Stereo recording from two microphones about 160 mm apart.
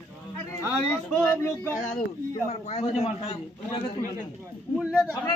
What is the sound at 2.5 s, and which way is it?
Speech, 45° left (ahead or behind).